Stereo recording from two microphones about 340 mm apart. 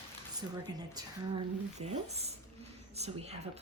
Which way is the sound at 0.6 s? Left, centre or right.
Centre.